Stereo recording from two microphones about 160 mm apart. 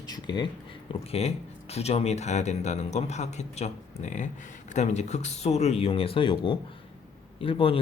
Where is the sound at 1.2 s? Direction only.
40° left (ahead or behind).